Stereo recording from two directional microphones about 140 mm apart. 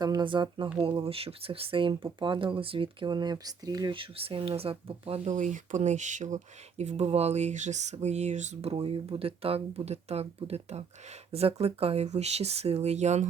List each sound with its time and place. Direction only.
0.0 s speech: 30° right (ahead or behind); by 13.2 s 55° right (ahead or behind)